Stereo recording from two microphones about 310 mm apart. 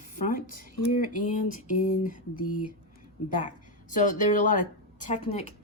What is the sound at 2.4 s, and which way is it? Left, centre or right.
Speech, left.